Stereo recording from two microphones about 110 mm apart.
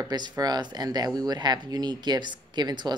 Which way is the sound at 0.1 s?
40° right (ahead or behind).